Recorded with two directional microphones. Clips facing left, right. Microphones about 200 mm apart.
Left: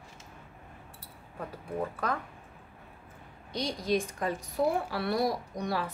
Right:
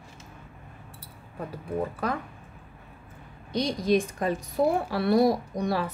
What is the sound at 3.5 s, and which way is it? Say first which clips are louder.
A woman's voice: right 6 dB; 15° right (ahead or behind).